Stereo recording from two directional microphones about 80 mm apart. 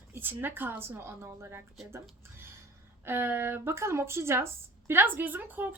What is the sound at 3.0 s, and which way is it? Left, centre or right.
A woman's voice, right.